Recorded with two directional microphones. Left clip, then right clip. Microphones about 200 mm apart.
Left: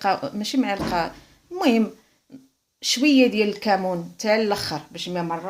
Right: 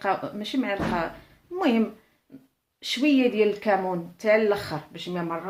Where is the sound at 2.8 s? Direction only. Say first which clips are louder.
Left 4 dB; 50° left (ahead or behind).